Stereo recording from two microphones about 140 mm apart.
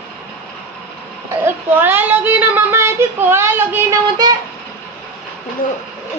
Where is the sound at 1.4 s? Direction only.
15° right (ahead or behind).